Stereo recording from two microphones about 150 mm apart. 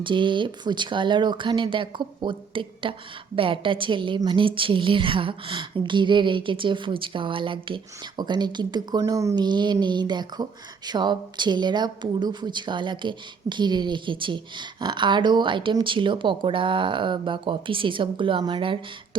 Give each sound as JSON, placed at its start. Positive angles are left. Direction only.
{"t": 0.0, "sound": "a woman's voice", "side_deg": -35}